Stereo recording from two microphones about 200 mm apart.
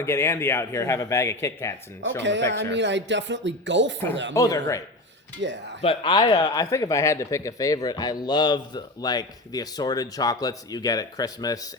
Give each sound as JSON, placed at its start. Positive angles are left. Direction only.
{"t": 0.0, "sound": "a man's voice", "side_deg": 15}
{"t": 2.2, "sound": "speech", "side_deg": -60}
{"t": 4.4, "sound": "a man's voice", "side_deg": 15}
{"t": 5.8, "sound": "speech", "side_deg": 25}